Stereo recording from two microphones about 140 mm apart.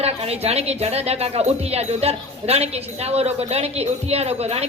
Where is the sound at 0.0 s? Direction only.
50° right (ahead or behind).